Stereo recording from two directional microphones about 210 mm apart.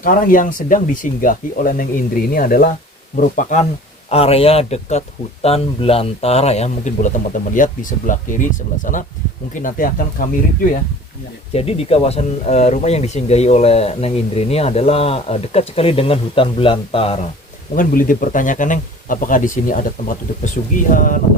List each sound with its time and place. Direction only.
0.0 s speech: 40° left (ahead or behind)
11.5 s speech: 30° left (ahead or behind)
17.7 s speech: 40° left (ahead or behind)